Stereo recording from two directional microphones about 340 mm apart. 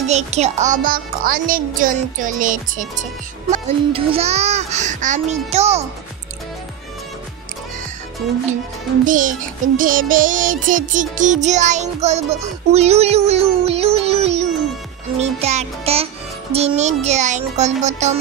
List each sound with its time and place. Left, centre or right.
0.1 s music: centre
9.0 s music: right